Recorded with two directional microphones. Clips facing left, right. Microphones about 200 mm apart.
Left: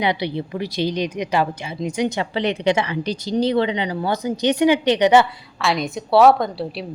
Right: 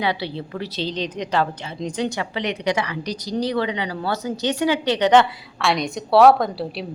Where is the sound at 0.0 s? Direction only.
15° left (ahead or behind).